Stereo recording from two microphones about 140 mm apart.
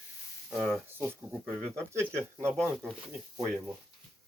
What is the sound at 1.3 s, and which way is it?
Speech, centre (ahead or behind).